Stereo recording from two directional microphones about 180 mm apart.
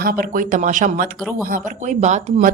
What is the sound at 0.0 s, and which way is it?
A woman's voice, 55° right (ahead or behind).